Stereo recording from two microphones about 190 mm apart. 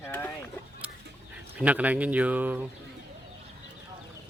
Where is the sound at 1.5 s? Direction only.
10° right (ahead or behind).